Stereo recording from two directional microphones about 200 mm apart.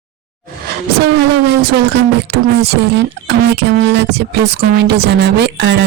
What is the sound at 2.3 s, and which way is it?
Speech, 55° right (ahead or behind).